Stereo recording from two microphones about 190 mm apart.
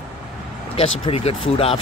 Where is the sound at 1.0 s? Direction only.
30° left (ahead or behind).